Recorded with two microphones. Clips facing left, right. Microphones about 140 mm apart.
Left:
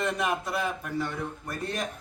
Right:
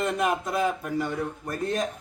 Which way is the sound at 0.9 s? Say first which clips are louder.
Right 3 dB; 15° right (ahead or behind).